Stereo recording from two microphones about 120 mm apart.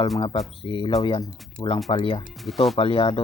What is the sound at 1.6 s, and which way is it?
Speech, 5° left (ahead or behind).